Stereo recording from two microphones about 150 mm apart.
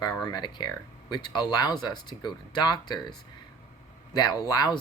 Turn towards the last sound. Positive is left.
turn(degrees=25)  # may be behind; listen again after turning